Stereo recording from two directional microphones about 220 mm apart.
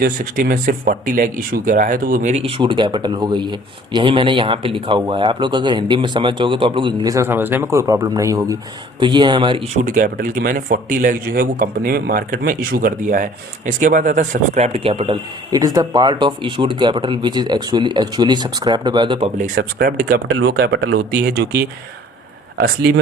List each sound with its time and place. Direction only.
0.0 s speech: 40° right (ahead or behind); by 9.6 s 20° right (ahead or behind)
9.8 s speech: 35° right (ahead or behind); by 19.3 s 20° right (ahead or behind)
19.4 s speech: 40° right (ahead or behind)
20.3 s speech: 50° right (ahead or behind)
22.6 s speech: 45° right (ahead or behind)